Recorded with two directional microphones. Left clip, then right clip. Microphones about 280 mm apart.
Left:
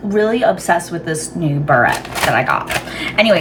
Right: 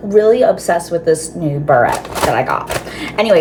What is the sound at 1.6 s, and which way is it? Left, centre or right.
Speech, centre.